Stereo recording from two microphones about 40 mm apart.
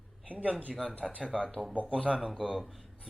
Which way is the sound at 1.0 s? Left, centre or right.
Right.